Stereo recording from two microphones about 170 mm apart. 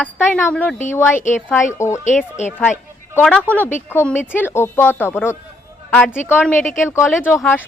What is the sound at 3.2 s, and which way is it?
Speech, 10° left (ahead or behind).